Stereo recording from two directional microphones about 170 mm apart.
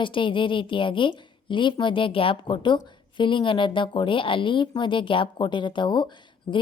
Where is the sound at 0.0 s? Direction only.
30° left (ahead or behind).